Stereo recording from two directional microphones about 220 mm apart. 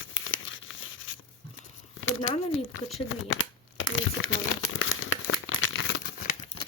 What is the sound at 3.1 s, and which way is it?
Crumpling, 60° left (ahead or behind).